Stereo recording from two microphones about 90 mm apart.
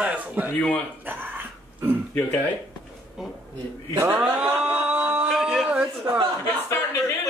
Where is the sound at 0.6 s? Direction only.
15° left (ahead or behind).